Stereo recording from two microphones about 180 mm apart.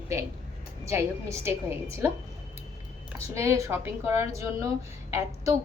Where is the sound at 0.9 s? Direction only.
15° right (ahead or behind).